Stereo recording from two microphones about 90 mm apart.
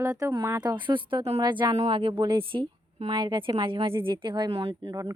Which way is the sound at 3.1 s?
55° right (ahead or behind).